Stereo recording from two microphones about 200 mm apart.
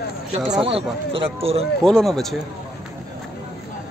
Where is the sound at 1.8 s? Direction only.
Centre (ahead or behind).